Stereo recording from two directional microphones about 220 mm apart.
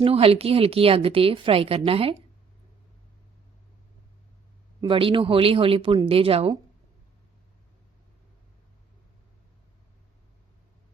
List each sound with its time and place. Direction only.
0.0 s a woman's voice: 25° right (ahead or behind)
4.8 s a woman's voice: 25° right (ahead or behind)